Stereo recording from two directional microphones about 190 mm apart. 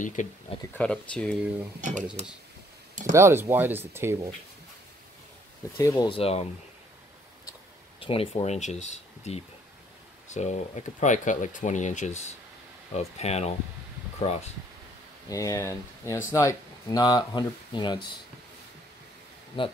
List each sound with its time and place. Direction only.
0.0 s speech: 40° left (ahead or behind)
0.7 s speech: 5° left (ahead or behind)
1.8 s speech: 40° right (ahead or behind)
3.1 s speech: 15° right (ahead or behind)
5.8 s speech: 20° left (ahead or behind)
8.0 s speech: 30° left (ahead or behind)
15.2 s speech: 20° left (ahead or behind)
19.6 s speech: 25° left (ahead or behind)